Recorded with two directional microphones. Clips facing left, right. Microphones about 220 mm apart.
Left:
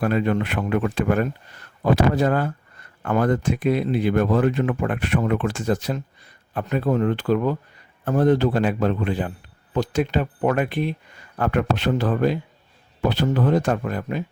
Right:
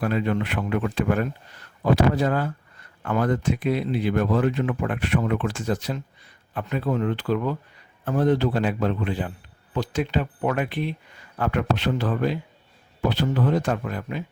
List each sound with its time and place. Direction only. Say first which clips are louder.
0.0 s speech: left 3 dB; 50° left (ahead or behind)